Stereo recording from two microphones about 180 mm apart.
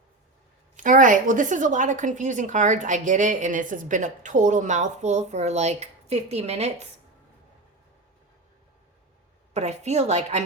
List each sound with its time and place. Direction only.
0.8 s a woman's voice: 45° right (ahead or behind)
9.6 s a woman's voice: 35° right (ahead or behind)